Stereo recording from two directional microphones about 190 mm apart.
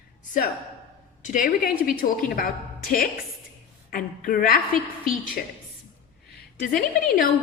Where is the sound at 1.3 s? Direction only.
45° left (ahead or behind).